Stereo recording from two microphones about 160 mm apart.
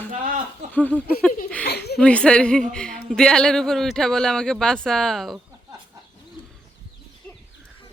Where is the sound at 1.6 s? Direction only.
90° left.